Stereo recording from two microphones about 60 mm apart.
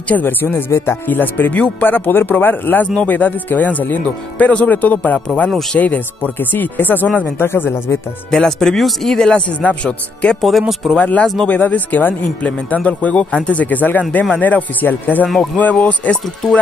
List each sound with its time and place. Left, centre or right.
0.1 s speech: left
1.0 s speech: left
7.2 s speech: left
8.3 s speech: centre; by 16.2 s left